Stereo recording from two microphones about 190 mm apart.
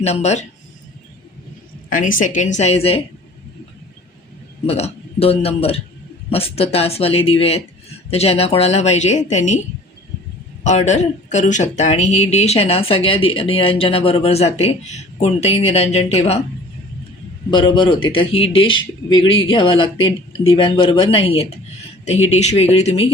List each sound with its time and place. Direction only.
0.0 s speech: 35° left (ahead or behind)
1.9 s speech: 45° left (ahead or behind)
4.6 s a man's voice: 30° left (ahead or behind)
10.6 s speech: 40° left (ahead or behind)
17.5 s a man's voice: 25° left (ahead or behind)